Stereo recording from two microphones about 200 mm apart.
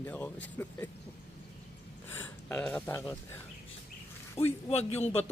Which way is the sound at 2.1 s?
10° left (ahead or behind).